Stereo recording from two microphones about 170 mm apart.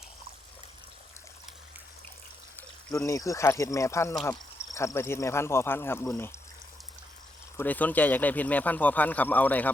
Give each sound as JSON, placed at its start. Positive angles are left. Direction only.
{"t": 2.6, "sound": "speech", "side_deg": 15}
{"t": 7.5, "sound": "speech", "side_deg": 10}